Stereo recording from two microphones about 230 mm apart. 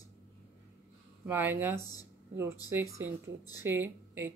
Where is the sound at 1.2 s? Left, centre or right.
Centre.